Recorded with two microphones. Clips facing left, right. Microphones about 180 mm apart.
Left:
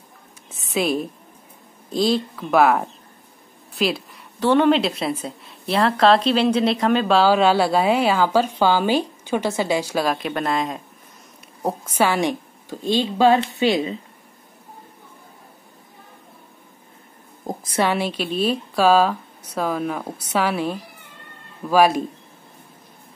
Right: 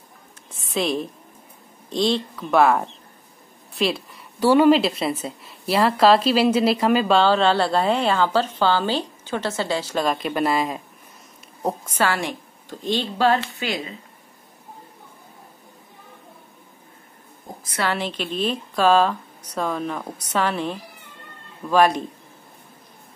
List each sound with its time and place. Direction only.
0.7 s a woman's voice: 5° left (ahead or behind)
12.0 s speech: 15° left (ahead or behind)
17.8 s speech: 10° left (ahead or behind)